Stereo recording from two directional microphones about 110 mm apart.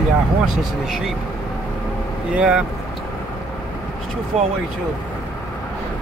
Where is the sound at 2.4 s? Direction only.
5° right (ahead or behind).